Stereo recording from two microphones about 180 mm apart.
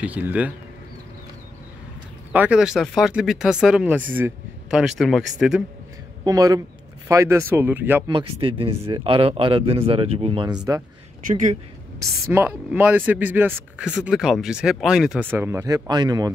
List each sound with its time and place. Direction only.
0.0 s speech: 10° right (ahead or behind)
2.3 s speech: 5° right (ahead or behind)
6.2 s speech: 20° right (ahead or behind)
8.1 s speech: 30° right (ahead or behind)
11.2 s speech: 45° right (ahead or behind)
12.3 s speech: 10° right (ahead or behind)